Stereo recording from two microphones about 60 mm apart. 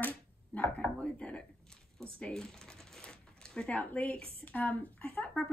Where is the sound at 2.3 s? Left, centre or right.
Centre.